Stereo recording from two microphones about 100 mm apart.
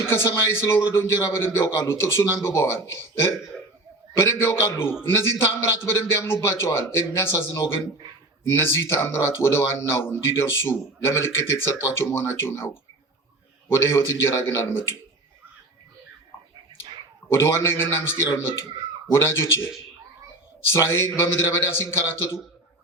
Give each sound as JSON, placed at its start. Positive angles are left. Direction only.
{"t": 0.0, "sound": "speech", "side_deg": 25}
{"t": 17.3, "sound": "speech", "side_deg": 25}
{"t": 20.7, "sound": "speech", "side_deg": 30}